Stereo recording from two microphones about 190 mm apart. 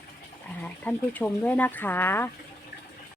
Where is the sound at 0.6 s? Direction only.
10° left (ahead or behind).